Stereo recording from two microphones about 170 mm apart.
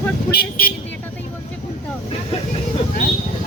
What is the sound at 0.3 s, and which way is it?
Speech, 65° left (ahead or behind).